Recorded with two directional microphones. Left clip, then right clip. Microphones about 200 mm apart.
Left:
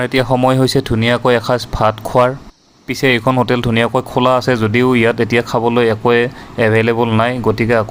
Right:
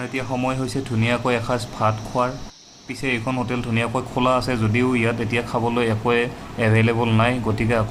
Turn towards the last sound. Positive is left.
turn(degrees=35)  # may be behind; listen again after turning